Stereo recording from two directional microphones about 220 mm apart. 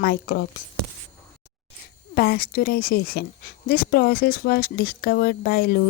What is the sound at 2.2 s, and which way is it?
Speech, 45° left (ahead or behind).